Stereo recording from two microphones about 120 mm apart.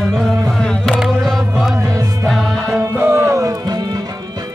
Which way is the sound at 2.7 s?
20° right (ahead or behind).